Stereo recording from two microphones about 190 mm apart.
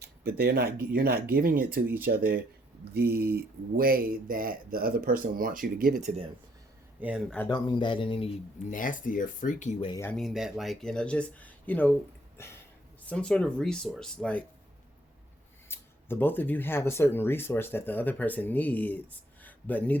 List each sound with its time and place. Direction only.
0.0 s speech: 55° right (ahead or behind)
6.0 s speech: 40° right (ahead or behind)
7.3 s speech: 10° left (ahead or behind)
7.5 s speech: 25° left (ahead or behind)
8.7 s speech: 45° left (ahead or behind)
10.0 s speech: 5° left (ahead or behind)
13.1 s speech: 5° left (ahead or behind)
15.7 s speech: 10° left (ahead or behind)